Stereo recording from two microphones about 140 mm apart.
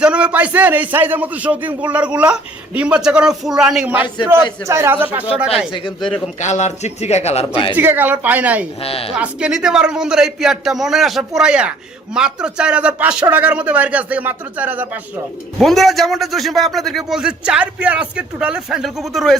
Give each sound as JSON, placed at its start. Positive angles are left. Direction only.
{"t": 0.0, "sound": "speech", "side_deg": -10}
{"t": 4.6, "sound": "speech", "side_deg": -20}
{"t": 6.4, "sound": "speech", "side_deg": 55}
{"t": 7.7, "sound": "speech", "side_deg": -15}
{"t": 8.8, "sound": "speech", "side_deg": 45}
{"t": 9.1, "sound": "speech", "side_deg": -5}
{"t": 15.5, "sound": "speech", "side_deg": 0}